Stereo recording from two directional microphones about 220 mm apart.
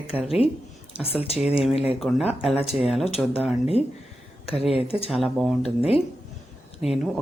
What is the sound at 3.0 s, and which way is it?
Speech, 25° left (ahead or behind).